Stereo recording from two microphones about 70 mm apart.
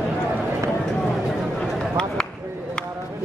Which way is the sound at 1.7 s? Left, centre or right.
Centre.